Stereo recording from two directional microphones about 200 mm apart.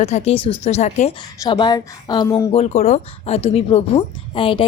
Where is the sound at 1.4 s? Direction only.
20° left (ahead or behind).